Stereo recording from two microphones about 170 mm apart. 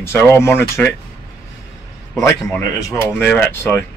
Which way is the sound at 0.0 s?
15° left (ahead or behind).